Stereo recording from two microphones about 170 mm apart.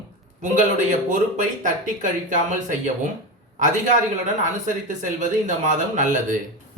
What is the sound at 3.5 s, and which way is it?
Speech, 50° right (ahead or behind).